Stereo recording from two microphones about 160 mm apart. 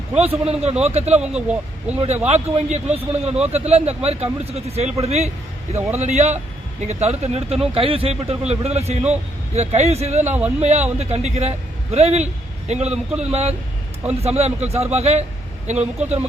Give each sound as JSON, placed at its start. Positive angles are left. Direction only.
{"t": 0.2, "sound": "speech", "side_deg": -40}
{"t": 1.2, "sound": "speech", "side_deg": -5}
{"t": 2.2, "sound": "a man's voice", "side_deg": -45}
{"t": 10.2, "sound": "speech", "side_deg": -10}
{"t": 10.6, "sound": "a man's voice", "side_deg": -45}